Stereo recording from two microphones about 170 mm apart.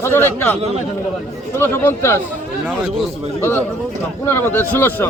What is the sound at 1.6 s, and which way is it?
Speech, 15° left (ahead or behind).